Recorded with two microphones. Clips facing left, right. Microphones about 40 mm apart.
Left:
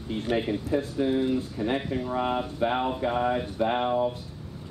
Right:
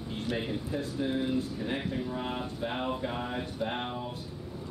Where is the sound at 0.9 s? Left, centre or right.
Centre.